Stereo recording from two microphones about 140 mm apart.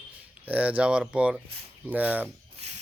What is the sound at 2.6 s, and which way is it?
Rub, 50° right (ahead or behind).